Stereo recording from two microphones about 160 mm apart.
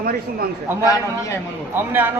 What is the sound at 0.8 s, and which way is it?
Speech, 20° left (ahead or behind).